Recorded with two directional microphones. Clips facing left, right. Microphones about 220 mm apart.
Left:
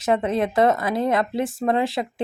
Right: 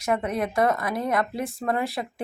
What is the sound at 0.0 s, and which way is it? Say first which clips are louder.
A woman's voice: left 4 dB; 25° left (ahead or behind).